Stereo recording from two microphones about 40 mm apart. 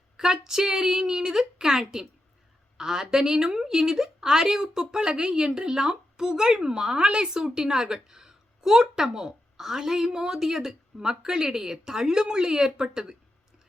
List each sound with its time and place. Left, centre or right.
0.2 s a woman's voice: centre